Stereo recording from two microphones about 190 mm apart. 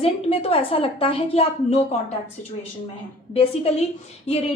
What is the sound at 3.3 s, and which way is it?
Speech, 30° left (ahead or behind).